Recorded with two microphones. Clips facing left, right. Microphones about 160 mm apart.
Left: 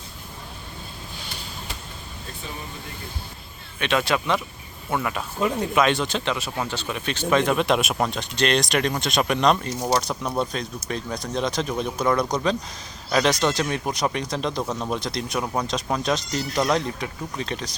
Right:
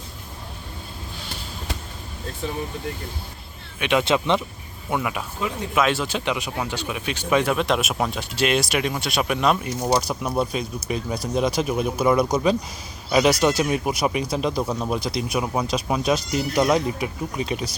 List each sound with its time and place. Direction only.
3.8 s speech: 15° right (ahead or behind)
4.9 s speech: 10° right (ahead or behind)